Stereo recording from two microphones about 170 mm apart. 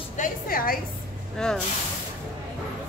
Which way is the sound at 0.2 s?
55° left (ahead or behind).